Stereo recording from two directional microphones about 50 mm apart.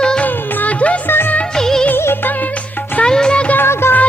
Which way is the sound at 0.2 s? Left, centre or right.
Left.